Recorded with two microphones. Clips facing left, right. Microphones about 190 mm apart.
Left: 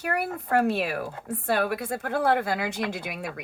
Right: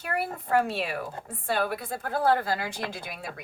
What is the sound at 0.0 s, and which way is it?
Speech, 60° left (ahead or behind).